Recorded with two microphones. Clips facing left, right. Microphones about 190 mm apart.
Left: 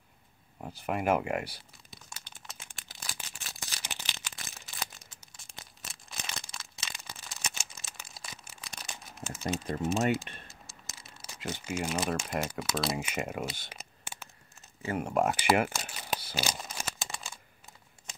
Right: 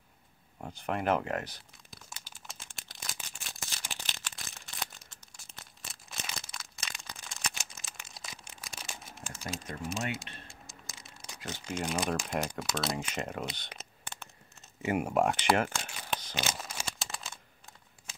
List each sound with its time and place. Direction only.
0.6 s speech: 5° left (ahead or behind)
2.0 s a sound: centre (ahead or behind)
11.0 s crumpling: centre (ahead or behind)
11.4 s speech: 10° left (ahead or behind)
13.6 s computer keyboard: 5° left (ahead or behind)
14.8 s speech: 15° right (ahead or behind)
15.0 s speech: centre (ahead or behind)
15.3 s a sound: 10° left (ahead or behind)